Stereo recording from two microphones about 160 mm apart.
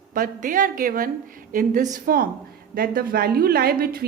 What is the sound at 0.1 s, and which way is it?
A woman's voice, 55° right (ahead or behind).